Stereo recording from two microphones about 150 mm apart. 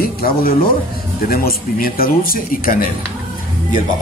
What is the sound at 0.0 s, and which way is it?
Speech, 80° left.